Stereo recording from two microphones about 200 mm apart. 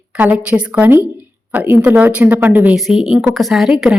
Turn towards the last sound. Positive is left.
turn(degrees=-5)  # may be behind; listen again after turning